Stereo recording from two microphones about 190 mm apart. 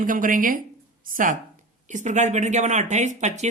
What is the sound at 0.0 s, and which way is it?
Speech, 45° right (ahead or behind).